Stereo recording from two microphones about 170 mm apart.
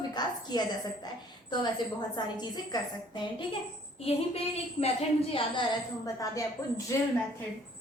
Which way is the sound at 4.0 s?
35° left (ahead or behind).